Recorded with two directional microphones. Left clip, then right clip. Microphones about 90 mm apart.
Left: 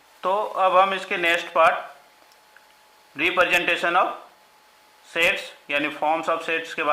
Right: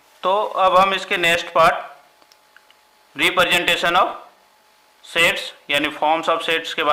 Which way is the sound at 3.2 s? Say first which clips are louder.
Right 3 dB; 25° right (ahead or behind).